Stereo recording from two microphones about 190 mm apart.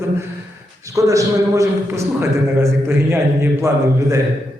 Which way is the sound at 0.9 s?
15° right (ahead or behind).